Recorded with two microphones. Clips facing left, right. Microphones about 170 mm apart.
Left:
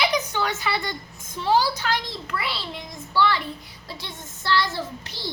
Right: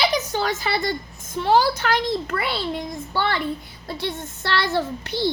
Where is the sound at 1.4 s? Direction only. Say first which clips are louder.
Right 3 dB; 55° right (ahead or behind).